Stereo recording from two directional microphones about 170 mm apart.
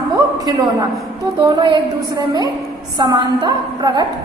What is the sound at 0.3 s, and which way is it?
A woman's voice, 20° right (ahead or behind).